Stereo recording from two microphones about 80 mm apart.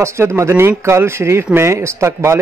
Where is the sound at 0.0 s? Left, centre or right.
Right.